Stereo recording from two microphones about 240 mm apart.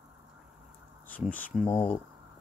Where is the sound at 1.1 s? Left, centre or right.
Centre.